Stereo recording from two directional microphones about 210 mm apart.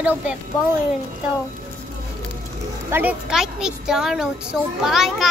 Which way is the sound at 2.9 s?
5° right (ahead or behind).